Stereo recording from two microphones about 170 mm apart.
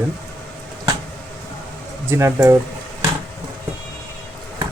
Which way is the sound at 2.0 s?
15° right (ahead or behind).